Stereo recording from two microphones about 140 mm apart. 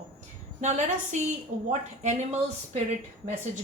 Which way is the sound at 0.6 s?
55° right (ahead or behind).